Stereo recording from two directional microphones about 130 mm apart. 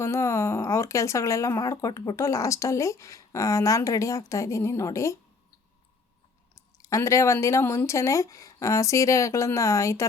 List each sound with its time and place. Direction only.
0.0 s speech: 20° left (ahead or behind)
6.6 s speech: 25° left (ahead or behind)